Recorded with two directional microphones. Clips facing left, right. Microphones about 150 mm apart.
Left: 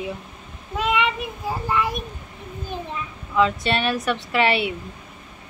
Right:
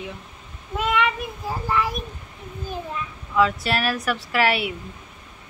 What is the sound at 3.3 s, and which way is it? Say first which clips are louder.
A woman's voice: left 1 dB; 5° right (ahead or behind).